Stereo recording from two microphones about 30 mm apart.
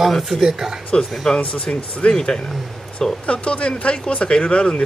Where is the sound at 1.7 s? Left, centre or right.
Left.